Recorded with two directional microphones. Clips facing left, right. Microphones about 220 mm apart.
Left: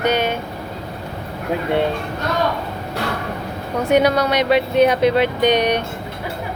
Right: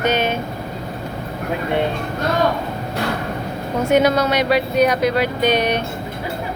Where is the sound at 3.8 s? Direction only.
15° left (ahead or behind).